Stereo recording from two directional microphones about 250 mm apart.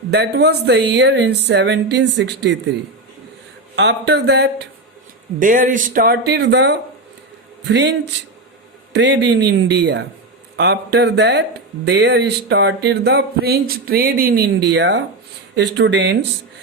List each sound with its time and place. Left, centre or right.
0.1 s speech: right
3.8 s speech: right